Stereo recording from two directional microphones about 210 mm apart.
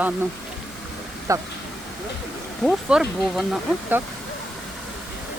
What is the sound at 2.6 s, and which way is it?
Speech, centre (ahead or behind).